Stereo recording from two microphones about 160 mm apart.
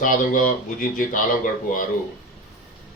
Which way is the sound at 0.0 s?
60° left (ahead or behind).